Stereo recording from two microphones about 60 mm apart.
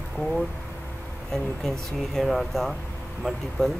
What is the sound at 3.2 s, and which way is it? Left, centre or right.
Speech, centre.